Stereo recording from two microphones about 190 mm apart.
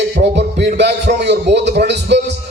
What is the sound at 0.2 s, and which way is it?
A man's voice, 60° right (ahead or behind).